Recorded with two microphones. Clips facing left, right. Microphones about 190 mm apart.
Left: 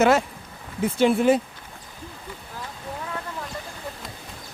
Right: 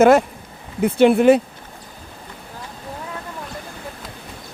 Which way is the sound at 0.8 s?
65° right (ahead or behind).